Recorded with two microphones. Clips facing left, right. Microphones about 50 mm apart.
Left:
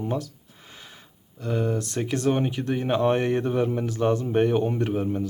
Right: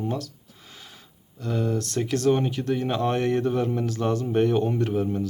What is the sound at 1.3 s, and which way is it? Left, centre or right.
Speech, left.